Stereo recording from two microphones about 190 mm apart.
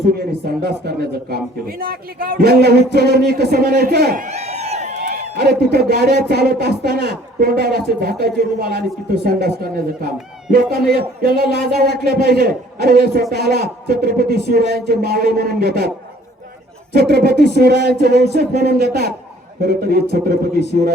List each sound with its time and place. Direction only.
0.1 s speech: 55° right (ahead or behind)
4.3 s a sound: 35° right (ahead or behind)
5.0 s a man's voice: 55° right (ahead or behind)
16.9 s a man's voice: 55° right (ahead or behind)